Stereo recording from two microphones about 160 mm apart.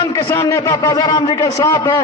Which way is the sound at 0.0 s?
20° left (ahead or behind).